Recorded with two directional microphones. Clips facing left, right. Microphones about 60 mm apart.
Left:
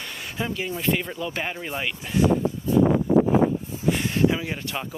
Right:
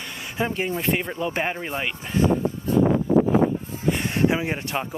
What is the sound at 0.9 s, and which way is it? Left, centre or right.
Speech, right.